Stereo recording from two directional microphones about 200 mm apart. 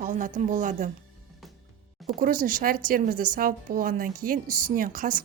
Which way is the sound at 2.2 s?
45° right (ahead or behind).